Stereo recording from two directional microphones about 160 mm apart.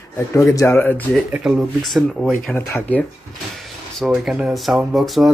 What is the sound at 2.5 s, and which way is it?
Speech, 10° left (ahead or behind).